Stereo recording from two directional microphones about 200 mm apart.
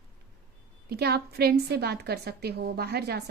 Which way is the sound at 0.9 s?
50° right (ahead or behind).